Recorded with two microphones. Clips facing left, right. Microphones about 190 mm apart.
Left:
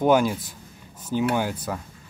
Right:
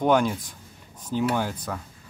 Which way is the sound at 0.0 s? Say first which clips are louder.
Left 2 dB; 5° left (ahead or behind).